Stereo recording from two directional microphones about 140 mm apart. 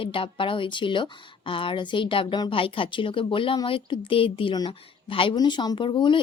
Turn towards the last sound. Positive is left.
turn(degrees=35)  # may be behind; listen again after turning